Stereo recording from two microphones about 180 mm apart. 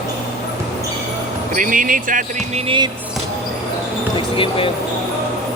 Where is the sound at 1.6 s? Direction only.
50° right (ahead or behind).